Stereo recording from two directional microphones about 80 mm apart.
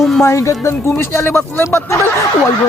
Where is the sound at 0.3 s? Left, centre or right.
Left.